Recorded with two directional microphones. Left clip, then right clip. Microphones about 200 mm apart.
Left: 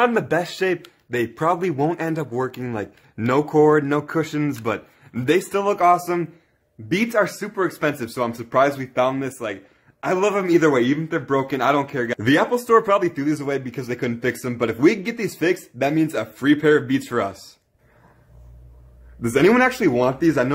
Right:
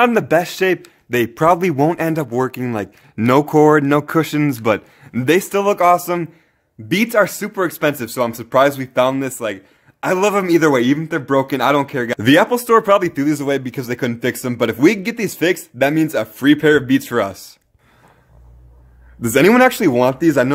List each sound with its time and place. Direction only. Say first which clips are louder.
0.0 s speech: right 5 dB; 40° right (ahead or behind)
19.2 s speech: right 5 dB; 50° right (ahead or behind)